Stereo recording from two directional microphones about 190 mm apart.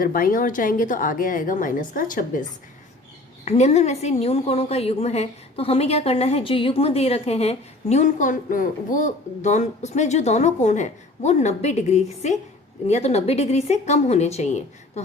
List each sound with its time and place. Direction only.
0.0 s a woman's voice: 50° left (ahead or behind)
3.4 s a woman's voice: 35° left (ahead or behind)